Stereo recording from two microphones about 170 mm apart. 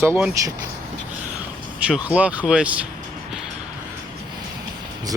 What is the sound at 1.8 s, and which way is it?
Speech, 5° right (ahead or behind).